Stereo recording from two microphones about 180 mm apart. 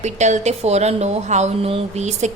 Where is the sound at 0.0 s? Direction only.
40° right (ahead or behind).